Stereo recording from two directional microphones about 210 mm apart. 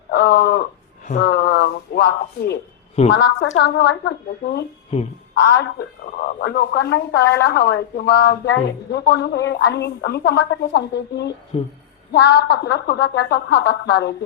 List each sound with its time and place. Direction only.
0.1 s speech: 50° left (ahead or behind)
1.2 s a sound: 55° left (ahead or behind)
3.1 s a woman's voice: 55° left (ahead or behind)
5.4 s a woman's voice: 50° left (ahead or behind)